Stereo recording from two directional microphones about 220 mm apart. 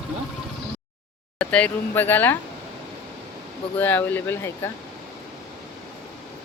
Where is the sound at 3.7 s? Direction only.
10° left (ahead or behind).